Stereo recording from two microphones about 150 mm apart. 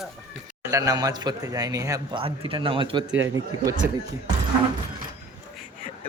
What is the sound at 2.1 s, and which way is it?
Speech, 35° right (ahead or behind).